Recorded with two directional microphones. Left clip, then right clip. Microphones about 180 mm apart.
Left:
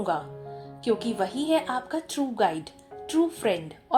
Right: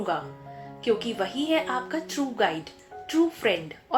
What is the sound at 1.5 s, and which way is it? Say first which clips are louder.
A woman's voice: even; 45° left (ahead or behind).